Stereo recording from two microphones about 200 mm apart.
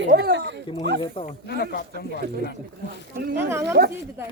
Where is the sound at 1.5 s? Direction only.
50° left (ahead or behind).